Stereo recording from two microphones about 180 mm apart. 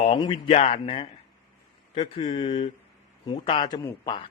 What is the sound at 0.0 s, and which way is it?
A man's voice, 30° left (ahead or behind).